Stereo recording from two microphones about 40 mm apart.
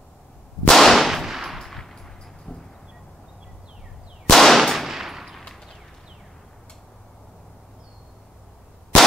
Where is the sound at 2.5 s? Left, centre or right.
Left.